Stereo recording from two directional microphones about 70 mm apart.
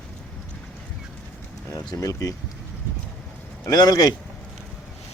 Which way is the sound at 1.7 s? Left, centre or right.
Left.